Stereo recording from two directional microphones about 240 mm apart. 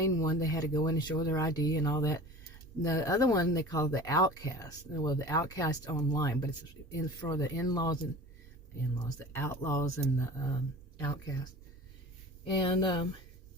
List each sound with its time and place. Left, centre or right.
0.2 s speech: centre
9.0 s speech: centre
12.6 s speech: centre